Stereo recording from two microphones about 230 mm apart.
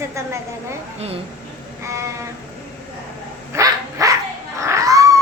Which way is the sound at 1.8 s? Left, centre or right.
Centre.